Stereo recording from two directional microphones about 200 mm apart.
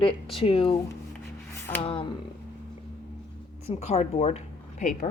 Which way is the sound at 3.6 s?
35° left (ahead or behind).